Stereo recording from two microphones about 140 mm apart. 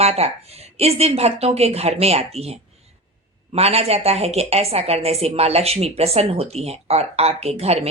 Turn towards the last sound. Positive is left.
turn(degrees=-45)  # may be behind; listen again after turning